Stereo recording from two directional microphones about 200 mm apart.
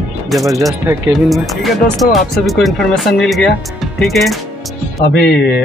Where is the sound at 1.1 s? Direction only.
Centre (ahead or behind).